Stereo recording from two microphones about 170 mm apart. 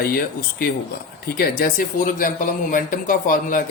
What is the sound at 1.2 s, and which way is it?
Speech, 60° left (ahead or behind).